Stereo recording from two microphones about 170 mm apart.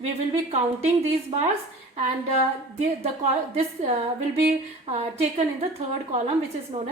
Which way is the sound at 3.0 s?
40° right (ahead or behind).